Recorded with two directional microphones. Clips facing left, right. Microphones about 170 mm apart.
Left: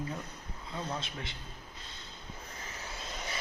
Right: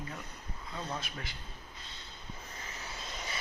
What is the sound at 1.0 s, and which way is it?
Speech, 25° left (ahead or behind).